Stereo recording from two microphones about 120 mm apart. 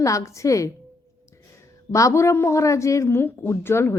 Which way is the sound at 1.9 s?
25° left (ahead or behind).